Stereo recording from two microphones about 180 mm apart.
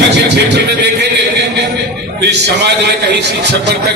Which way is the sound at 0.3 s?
65° right (ahead or behind).